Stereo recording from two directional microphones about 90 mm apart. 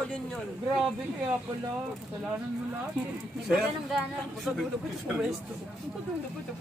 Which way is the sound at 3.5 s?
5° right (ahead or behind).